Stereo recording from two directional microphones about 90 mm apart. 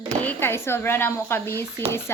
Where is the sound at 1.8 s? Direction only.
90° right.